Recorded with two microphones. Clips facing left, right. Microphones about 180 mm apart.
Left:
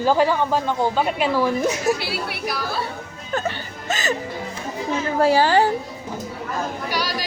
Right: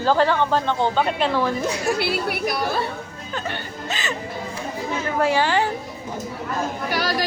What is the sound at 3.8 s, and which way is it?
Speech, 45° left (ahead or behind).